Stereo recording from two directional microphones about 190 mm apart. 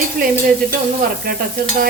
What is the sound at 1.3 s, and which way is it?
Stir, 50° right (ahead or behind).